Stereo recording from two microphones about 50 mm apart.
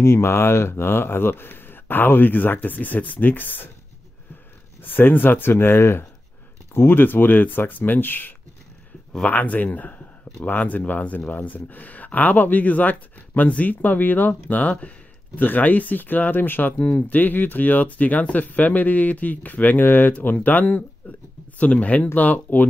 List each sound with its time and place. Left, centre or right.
0.0 s speech: left
4.8 s speech: left